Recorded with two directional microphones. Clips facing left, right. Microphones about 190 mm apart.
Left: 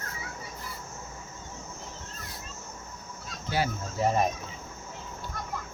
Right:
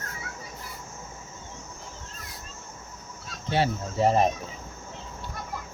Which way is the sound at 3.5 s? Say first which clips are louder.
Right 4 dB; 30° right (ahead or behind).